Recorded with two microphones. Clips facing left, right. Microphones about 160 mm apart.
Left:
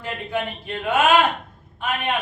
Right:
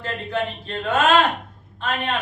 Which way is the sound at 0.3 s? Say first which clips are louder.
Right 1 dB; 10° left (ahead or behind).